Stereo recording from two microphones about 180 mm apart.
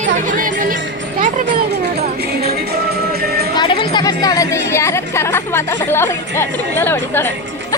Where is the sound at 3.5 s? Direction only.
25° left (ahead or behind).